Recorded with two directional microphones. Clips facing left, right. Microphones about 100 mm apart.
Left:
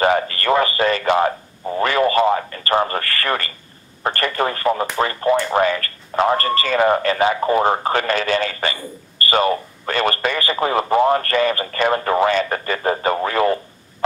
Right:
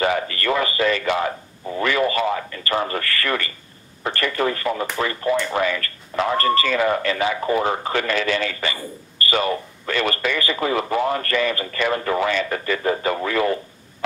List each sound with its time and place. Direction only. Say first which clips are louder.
0.0 s radio: left 4 dB; 40° left (ahead or behind)
4.0 s speech: left 2 dB; 40° left (ahead or behind)